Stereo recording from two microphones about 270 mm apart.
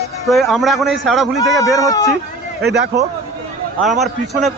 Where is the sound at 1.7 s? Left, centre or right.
Centre.